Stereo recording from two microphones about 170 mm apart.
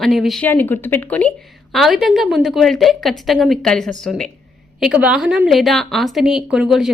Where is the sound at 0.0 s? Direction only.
Centre (ahead or behind).